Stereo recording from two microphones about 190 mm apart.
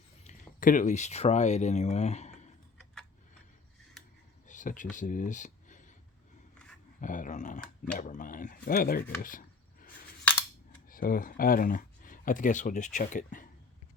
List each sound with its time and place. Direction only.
0.3 s speech: 45° left (ahead or behind)
4.4 s speech: 40° left (ahead or behind)
7.0 s speech: 45° left (ahead or behind)
10.8 s speech: 50° left (ahead or behind)